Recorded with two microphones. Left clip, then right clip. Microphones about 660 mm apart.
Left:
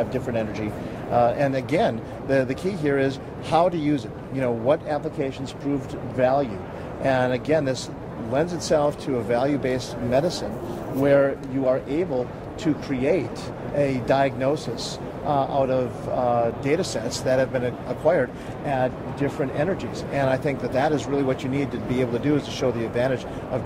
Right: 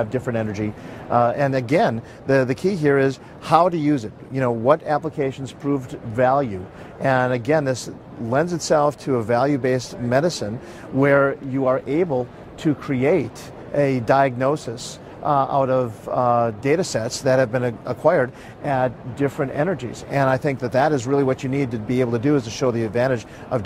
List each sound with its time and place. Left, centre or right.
0.1 s speech: right